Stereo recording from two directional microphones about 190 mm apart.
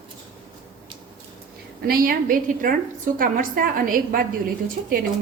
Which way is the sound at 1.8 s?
50° right (ahead or behind).